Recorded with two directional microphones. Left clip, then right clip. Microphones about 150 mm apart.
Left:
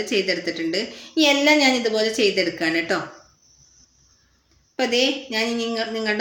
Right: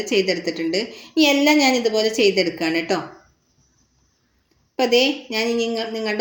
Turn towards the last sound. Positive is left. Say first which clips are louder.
# even
turn(degrees=-15)  # may be behind; listen again after turning